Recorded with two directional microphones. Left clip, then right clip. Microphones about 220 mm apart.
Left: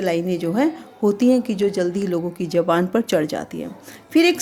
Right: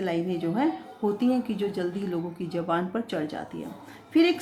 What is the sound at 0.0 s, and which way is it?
A woman's voice, 50° left (ahead or behind).